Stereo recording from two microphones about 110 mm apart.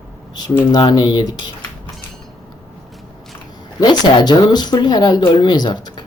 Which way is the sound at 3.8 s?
40° left (ahead or behind).